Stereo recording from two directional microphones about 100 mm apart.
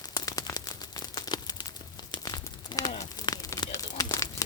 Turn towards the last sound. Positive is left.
turn(degrees=35)  # may be behind; listen again after turning